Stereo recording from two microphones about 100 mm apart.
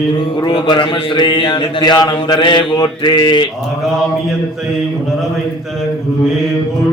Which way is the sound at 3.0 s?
50° left (ahead or behind).